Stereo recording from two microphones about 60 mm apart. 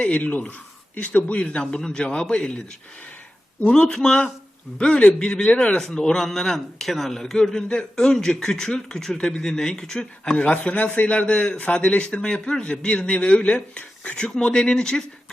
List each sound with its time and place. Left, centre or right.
0.0 s a man's voice: left
3.6 s a man's voice: centre
10.5 s a man's voice: left